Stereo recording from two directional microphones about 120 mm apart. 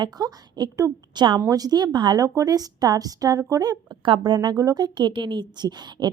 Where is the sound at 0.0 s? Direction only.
35° right (ahead or behind).